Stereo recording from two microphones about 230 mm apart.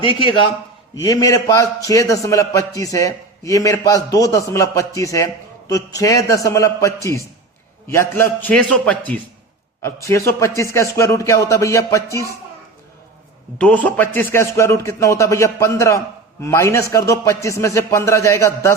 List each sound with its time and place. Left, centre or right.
0.0 s a man's voice: left
13.6 s a man's voice: centre